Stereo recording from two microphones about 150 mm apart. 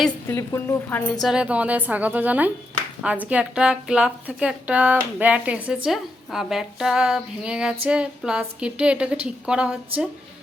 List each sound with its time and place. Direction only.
0.3 s a woman's voice: 15° left (ahead or behind)
1.2 s a woman's voice: 5° right (ahead or behind)